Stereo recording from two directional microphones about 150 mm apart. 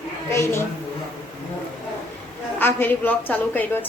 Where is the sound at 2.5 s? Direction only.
15° left (ahead or behind).